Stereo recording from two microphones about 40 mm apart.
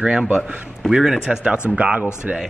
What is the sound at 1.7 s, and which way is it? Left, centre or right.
Speech, right.